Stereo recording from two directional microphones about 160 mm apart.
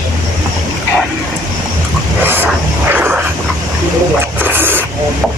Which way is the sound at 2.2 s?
15° right (ahead or behind).